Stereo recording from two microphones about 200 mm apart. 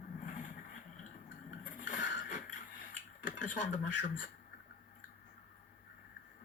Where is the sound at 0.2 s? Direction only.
40° left (ahead or behind).